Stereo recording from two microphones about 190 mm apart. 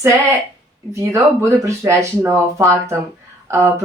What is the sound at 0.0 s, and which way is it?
Speech, 15° right (ahead or behind).